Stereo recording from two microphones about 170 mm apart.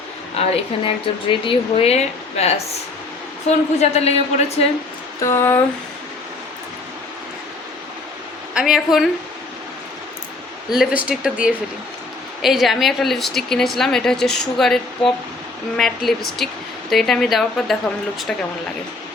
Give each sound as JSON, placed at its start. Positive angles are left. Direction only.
{"t": 0.4, "sound": "speech", "side_deg": 40}
{"t": 3.5, "sound": "speech", "side_deg": 40}
{"t": 5.2, "sound": "speech", "side_deg": 15}
{"t": 8.5, "sound": "a woman's voice", "side_deg": -5}
{"t": 10.8, "sound": "a woman's voice", "side_deg": -5}